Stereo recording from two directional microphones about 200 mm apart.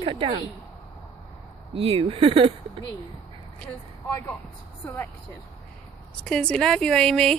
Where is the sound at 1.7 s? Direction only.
30° right (ahead or behind).